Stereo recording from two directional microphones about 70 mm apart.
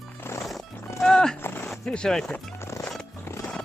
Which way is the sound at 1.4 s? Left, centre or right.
Left.